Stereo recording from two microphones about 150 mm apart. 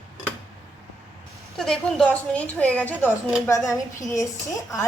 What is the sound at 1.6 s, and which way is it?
A woman's voice, 5° left (ahead or behind).